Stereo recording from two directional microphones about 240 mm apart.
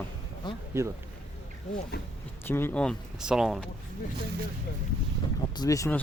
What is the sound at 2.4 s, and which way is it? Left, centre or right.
Speech, centre.